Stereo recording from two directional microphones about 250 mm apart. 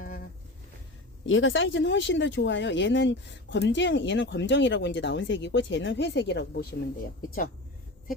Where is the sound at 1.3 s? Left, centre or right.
Left.